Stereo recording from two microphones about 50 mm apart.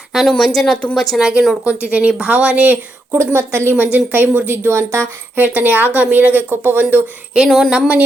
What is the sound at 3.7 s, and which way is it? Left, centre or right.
A woman's voice, right.